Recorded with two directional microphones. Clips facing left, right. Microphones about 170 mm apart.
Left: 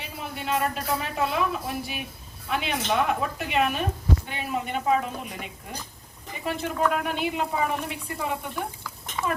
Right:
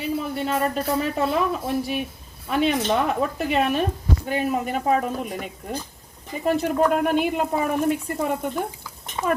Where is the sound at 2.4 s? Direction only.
40° right (ahead or behind).